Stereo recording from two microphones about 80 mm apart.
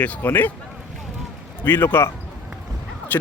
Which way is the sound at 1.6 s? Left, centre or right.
Left.